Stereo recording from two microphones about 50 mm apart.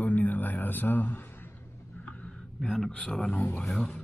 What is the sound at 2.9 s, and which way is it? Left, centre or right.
Speech, centre.